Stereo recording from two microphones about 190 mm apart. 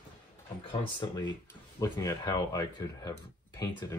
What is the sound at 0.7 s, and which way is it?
Speech, 25° left (ahead or behind).